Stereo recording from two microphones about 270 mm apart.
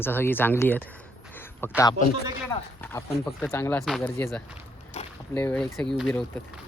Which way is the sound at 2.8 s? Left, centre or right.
Centre.